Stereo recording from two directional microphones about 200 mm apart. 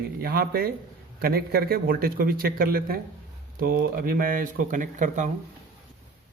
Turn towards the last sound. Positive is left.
turn(degrees=-40)  # may be behind; listen again after turning